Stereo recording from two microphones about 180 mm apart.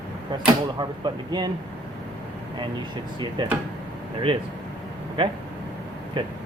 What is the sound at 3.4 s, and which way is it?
Speech, 25° right (ahead or behind).